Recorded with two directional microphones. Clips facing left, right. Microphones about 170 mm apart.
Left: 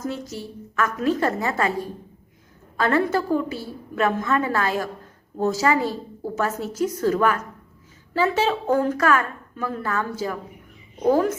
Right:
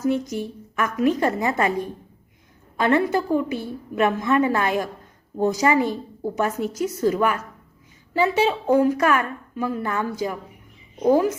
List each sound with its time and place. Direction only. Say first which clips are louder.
0.0 s a woman's voice: right 7 dB; 15° right (ahead or behind)
2.7 s a woman's voice: right 1 dB; 15° right (ahead or behind)